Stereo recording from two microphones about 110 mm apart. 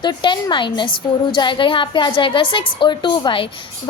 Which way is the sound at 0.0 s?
45° left (ahead or behind).